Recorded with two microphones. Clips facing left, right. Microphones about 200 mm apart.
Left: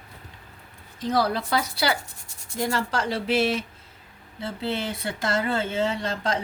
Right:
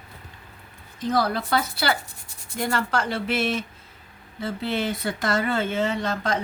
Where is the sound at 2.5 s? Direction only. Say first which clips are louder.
Right 1 dB; 35° left (ahead or behind).